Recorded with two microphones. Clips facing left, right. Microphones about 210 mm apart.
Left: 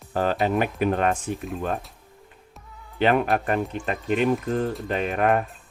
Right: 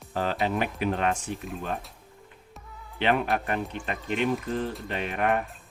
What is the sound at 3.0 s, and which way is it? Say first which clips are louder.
Speech: left 4 dB; 45° left (ahead or behind).